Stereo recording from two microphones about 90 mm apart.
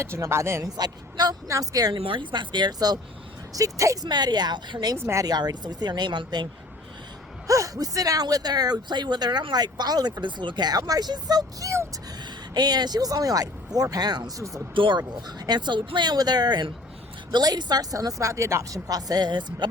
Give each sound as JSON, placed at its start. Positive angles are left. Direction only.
{"t": 0.0, "sound": "speech", "side_deg": -30}
{"t": 0.8, "sound": "a woman's voice", "side_deg": -50}
{"t": 1.9, "sound": "speech", "side_deg": -70}
{"t": 3.5, "sound": "speech", "side_deg": -35}
{"t": 4.1, "sound": "a woman's voice", "side_deg": -50}
{"t": 4.9, "sound": "speech", "side_deg": -30}
{"t": 5.2, "sound": "a woman's voice", "side_deg": -45}
{"t": 7.4, "sound": "a woman's voice", "side_deg": -40}
{"t": 14.8, "sound": "a woman's voice", "side_deg": -60}